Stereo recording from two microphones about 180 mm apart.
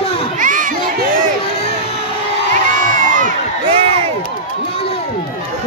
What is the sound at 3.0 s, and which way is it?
Crowd, 45° right (ahead or behind).